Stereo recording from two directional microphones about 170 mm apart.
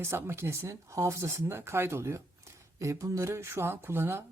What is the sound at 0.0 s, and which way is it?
A woman's voice, 15° right (ahead or behind).